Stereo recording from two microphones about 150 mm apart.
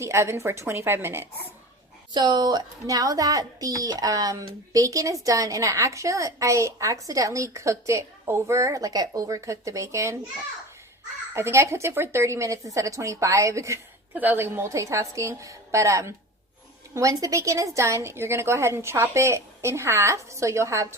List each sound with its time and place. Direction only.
0.0 s a woman's voice: 20° right (ahead or behind)
2.1 s speech: 25° right (ahead or behind)
11.3 s speech: 15° right (ahead or behind)